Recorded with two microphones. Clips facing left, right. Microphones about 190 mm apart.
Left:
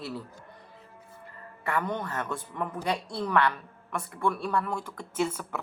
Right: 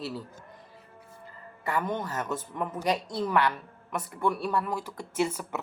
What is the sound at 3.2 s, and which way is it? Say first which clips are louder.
Speech: left 3 dB; 5° right (ahead or behind).